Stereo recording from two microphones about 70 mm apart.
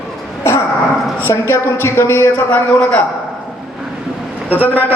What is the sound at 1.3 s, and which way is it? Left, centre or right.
A woman's voice, left.